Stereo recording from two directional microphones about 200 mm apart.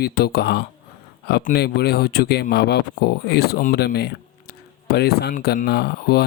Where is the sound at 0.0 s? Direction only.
50° left (ahead or behind).